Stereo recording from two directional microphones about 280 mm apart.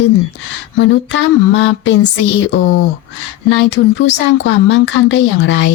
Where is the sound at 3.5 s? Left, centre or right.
Left.